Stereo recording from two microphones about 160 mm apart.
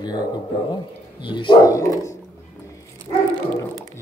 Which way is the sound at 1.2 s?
30° left (ahead or behind).